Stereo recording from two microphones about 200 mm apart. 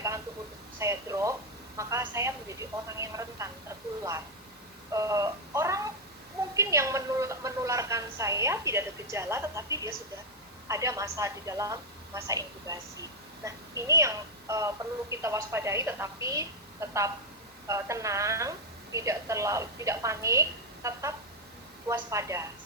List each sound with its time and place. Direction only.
0.8 s a woman's voice: 15° right (ahead or behind)
4.9 s a woman's voice: 15° right (ahead or behind)